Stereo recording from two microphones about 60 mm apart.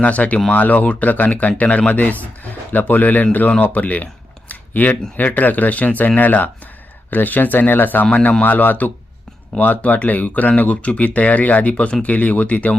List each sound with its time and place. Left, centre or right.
0.0 s speech: left